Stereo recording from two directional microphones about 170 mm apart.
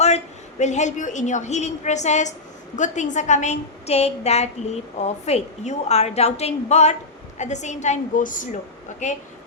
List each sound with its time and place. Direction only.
0.6 s a woman's voice: 45° left (ahead or behind)